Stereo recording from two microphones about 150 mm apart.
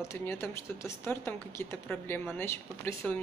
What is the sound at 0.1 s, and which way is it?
Speech, 15° left (ahead or behind).